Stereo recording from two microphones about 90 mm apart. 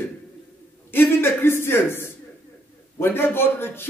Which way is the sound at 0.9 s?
25° left (ahead or behind).